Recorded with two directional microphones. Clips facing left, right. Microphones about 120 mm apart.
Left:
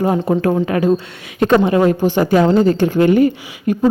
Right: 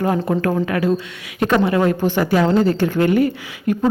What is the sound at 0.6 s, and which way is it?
A woman's voice, 25° left (ahead or behind).